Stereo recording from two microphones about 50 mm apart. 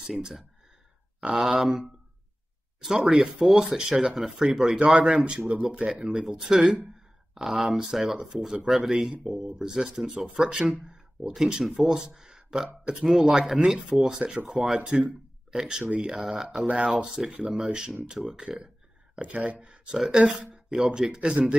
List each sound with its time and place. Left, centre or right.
0.0 s speech: centre
5.1 s speech: right
6.4 s speech: centre
11.6 s speech: centre
14.8 s speech: centre
19.1 s speech: right
20.5 s a sound: centre
21.1 s speech: centre